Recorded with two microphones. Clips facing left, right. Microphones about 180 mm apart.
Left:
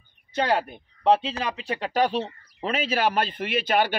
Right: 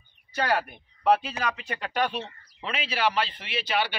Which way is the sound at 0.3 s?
20° left (ahead or behind).